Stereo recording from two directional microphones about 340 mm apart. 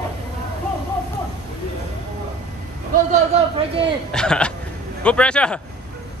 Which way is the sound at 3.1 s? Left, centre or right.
Centre.